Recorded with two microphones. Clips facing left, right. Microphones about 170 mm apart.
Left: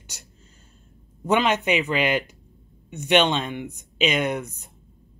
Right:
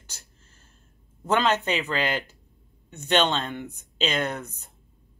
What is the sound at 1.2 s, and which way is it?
Speech, 15° left (ahead or behind).